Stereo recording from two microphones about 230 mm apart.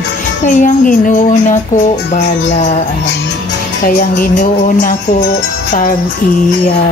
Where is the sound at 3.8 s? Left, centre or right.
Left.